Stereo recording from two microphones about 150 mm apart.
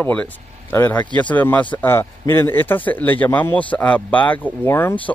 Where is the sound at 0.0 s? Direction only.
10° left (ahead or behind).